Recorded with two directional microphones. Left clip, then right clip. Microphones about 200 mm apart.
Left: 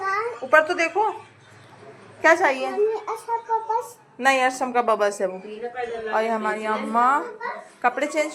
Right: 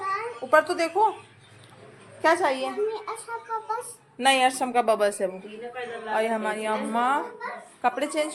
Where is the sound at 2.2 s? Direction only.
Centre (ahead or behind).